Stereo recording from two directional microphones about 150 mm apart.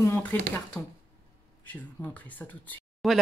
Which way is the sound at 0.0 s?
15° left (ahead or behind).